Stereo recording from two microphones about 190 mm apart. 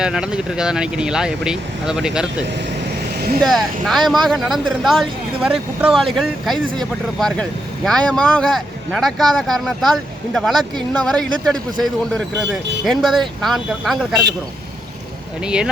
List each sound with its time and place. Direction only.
0.0 s speech: 5° right (ahead or behind)
3.4 s speech: centre (ahead or behind)
15.4 s speech: 5° right (ahead or behind)